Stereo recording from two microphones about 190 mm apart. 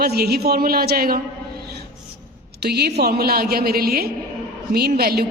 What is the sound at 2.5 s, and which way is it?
A woman's voice, 55° right (ahead or behind).